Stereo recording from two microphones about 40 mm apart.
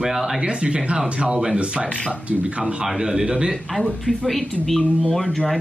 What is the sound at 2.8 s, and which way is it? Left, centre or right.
Speech, centre.